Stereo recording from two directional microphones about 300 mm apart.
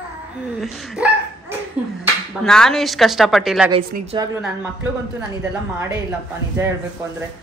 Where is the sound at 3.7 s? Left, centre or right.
Centre.